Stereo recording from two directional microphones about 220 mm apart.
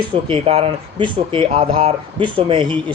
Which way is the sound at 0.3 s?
25° right (ahead or behind).